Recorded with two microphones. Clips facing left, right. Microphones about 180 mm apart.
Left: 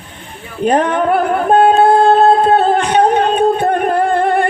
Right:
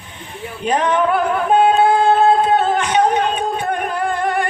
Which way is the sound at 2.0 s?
60° left (ahead or behind).